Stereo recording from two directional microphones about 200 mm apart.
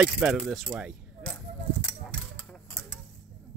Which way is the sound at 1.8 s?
5° left (ahead or behind).